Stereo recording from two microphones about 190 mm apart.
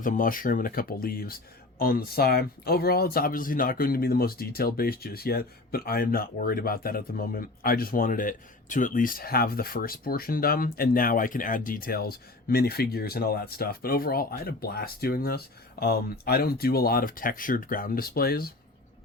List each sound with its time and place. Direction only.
0.0 s speech: 45° left (ahead or behind)